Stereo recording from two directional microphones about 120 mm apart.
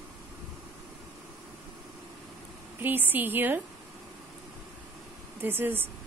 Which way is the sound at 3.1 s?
15° right (ahead or behind).